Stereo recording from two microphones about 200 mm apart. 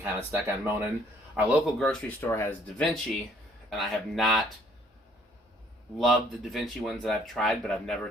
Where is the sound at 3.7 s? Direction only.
Centre (ahead or behind).